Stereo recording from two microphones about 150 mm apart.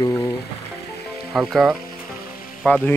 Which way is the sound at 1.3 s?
Centre (ahead or behind).